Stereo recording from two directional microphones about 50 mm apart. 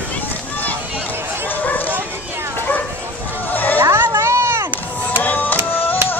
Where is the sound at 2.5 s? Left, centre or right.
Left.